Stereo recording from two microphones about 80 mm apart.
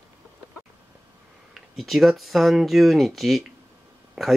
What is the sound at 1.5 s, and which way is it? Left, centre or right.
Speech, centre.